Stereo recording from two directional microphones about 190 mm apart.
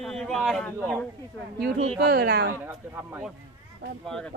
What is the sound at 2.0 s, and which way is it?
Speech, 55° right (ahead or behind).